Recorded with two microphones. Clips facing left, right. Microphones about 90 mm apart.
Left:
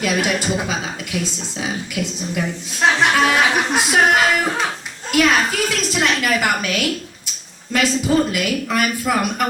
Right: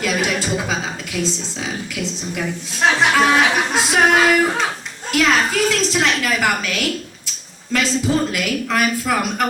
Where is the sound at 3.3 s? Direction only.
20° right (ahead or behind).